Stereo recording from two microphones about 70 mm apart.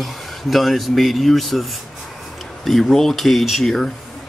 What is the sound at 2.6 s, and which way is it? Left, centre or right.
Speech, centre.